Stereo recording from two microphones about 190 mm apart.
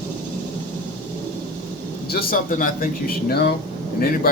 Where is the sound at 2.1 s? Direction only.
45° left (ahead or behind).